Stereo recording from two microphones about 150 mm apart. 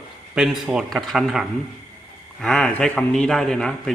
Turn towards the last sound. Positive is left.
turn(degrees=5)  # may be behind; listen again after turning